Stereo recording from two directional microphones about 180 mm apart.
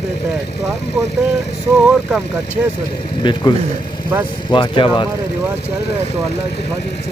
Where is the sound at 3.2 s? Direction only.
25° left (ahead or behind).